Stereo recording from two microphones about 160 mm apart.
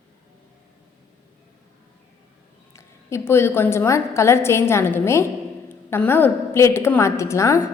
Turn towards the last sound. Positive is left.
turn(degrees=20)  # may be behind; listen again after turning